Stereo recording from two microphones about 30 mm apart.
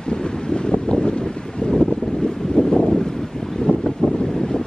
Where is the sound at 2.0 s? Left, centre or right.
Centre.